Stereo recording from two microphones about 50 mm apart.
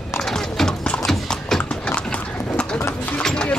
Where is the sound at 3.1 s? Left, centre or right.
Centre.